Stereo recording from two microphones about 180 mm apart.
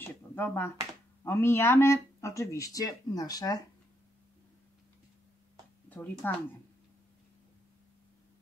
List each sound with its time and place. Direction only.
0.0 s a sound: 10° left (ahead or behind)
1.2 s speech: 15° left (ahead or behind)
5.9 s speech: 10° left (ahead or behind)